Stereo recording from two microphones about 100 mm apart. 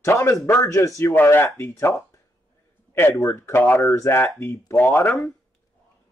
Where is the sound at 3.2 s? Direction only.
30° left (ahead or behind).